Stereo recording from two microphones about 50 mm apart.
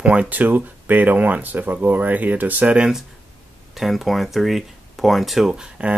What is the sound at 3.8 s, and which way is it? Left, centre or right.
Speech, centre.